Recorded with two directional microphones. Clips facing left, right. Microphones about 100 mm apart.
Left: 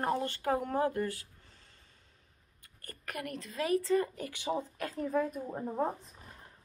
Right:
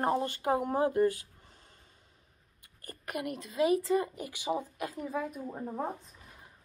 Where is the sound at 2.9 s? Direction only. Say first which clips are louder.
Right 4 dB; 15° right (ahead or behind).